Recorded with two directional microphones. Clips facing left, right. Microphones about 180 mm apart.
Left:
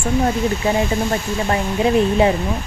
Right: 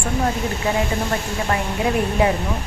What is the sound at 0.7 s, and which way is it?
A woman's voice, 25° left (ahead or behind).